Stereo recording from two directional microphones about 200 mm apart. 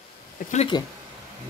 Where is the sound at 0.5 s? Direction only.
25° left (ahead or behind).